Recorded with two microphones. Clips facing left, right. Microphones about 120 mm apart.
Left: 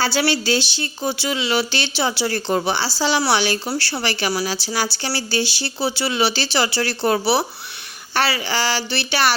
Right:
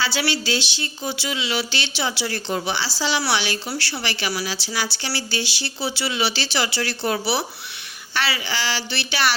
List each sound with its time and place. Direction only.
0.0 s speech: 40° left (ahead or behind)